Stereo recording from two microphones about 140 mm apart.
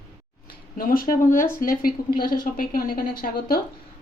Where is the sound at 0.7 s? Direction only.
90° left.